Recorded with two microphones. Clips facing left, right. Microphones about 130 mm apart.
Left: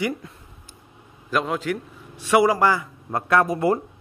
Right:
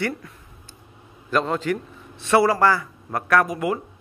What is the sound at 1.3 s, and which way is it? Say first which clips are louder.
A man's voice: right 2 dB; 5° left (ahead or behind).